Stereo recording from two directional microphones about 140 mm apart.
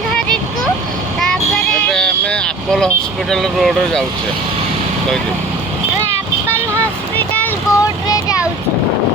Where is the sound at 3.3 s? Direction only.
Centre (ahead or behind).